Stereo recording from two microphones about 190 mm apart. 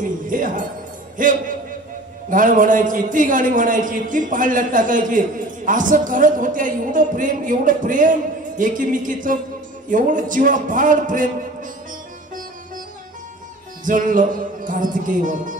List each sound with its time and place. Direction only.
0.0 s jingle bell: 45° right (ahead or behind)
1.1 s a man's voice: 45° right (ahead or behind)
13.8 s a man's voice: 45° right (ahead or behind)